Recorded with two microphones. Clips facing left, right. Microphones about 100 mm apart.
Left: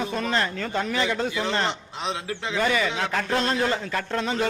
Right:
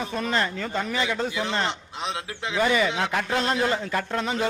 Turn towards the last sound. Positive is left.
turn(degrees=-10)  # may be behind; listen again after turning